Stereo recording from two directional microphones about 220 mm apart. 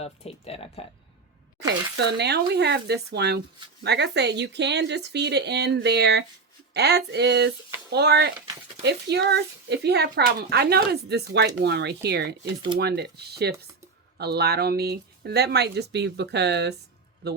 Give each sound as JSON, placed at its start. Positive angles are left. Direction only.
{"t": 0.0, "sound": "speech", "side_deg": 25}
{"t": 2.1, "sound": "a man's voice", "side_deg": -50}